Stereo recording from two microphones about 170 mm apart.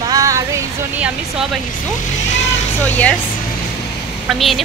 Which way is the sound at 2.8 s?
10° left (ahead or behind).